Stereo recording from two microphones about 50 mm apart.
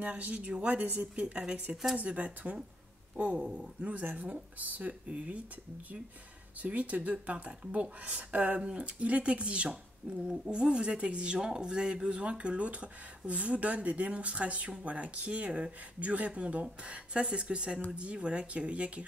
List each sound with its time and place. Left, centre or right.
0.0 s speech: right
6.6 s speech: right